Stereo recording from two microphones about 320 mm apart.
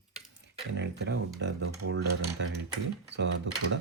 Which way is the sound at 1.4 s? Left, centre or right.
Right.